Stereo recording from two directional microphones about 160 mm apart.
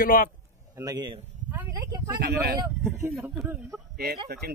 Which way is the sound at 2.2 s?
85° right.